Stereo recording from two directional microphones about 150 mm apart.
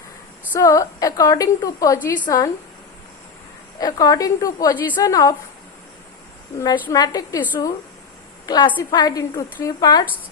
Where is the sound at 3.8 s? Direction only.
25° left (ahead or behind).